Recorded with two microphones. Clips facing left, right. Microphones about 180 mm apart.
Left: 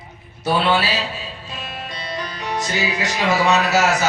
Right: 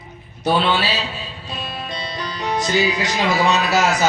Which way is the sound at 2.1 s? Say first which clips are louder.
Left 1 dB; 35° right (ahead or behind).